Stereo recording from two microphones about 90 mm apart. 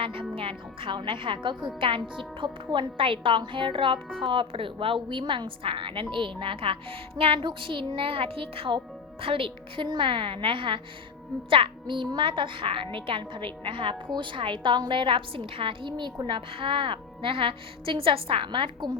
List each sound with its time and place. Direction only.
0.0 s a woman's voice: 80° right; by 16.1 s 60° right (ahead or behind)
16.2 s a woman's voice: 75° right (ahead or behind)